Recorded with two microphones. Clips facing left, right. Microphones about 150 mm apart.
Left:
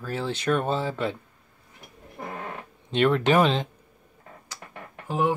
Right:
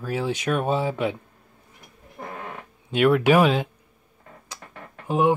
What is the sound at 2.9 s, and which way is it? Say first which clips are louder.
Speech: right 3 dB; 5° right (ahead or behind).